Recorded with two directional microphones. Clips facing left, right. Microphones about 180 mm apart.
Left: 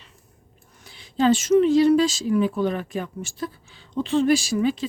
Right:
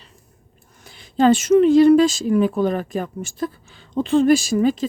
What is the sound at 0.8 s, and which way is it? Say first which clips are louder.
Speech: right 4 dB; 50° right (ahead or behind).